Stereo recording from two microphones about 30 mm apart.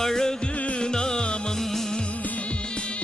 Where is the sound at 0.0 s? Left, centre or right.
Centre.